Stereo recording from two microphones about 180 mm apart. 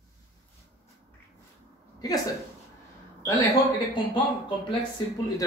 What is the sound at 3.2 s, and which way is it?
Speech, 20° left (ahead or behind).